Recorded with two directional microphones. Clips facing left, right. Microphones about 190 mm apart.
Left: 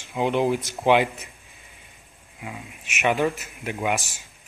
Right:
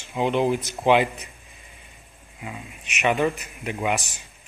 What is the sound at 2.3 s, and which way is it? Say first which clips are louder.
Speech: even; 5° left (ahead or behind).